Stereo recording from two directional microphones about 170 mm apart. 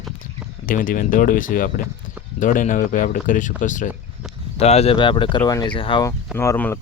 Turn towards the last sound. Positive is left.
turn(degrees=15)  # may be behind; listen again after turning